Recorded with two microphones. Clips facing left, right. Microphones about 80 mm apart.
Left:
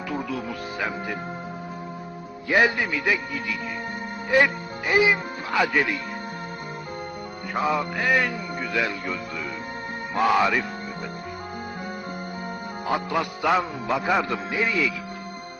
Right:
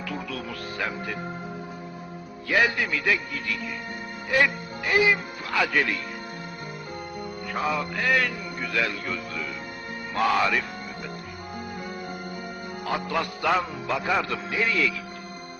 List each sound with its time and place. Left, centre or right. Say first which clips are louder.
0.1 s a man's voice: left 6 dB; centre
2.5 s a man's voice: left 2 dB; left
4.3 s speech: left 3 dB; left
7.7 s a man's voice: left 2 dB; centre
10.2 s a man's voice: left 2 dB; centre
13.1 s a man's voice: left 1 dB; centre